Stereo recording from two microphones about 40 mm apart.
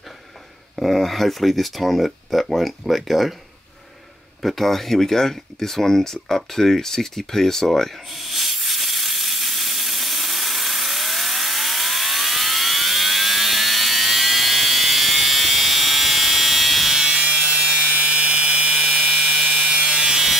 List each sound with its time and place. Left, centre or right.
0.7 s speech: centre
4.4 s speech: centre
8.1 s steam: centre
17.1 s wood: right
17.9 s a sound: right
19.4 s wood: right; by 20.3 s centre